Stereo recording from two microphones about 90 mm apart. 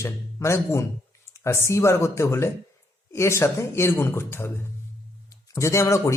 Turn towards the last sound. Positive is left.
turn(degrees=30)  # may be behind; listen again after turning